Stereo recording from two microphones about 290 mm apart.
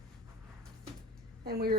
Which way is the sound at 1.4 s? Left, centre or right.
Right.